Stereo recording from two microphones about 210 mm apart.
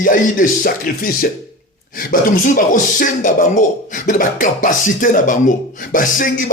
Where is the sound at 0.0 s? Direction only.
40° left (ahead or behind).